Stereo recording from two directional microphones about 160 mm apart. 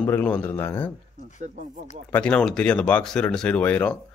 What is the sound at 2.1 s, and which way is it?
Speech, 5° left (ahead or behind).